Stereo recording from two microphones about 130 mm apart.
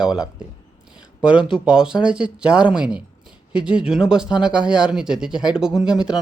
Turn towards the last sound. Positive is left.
turn(degrees=-5)  # may be behind; listen again after turning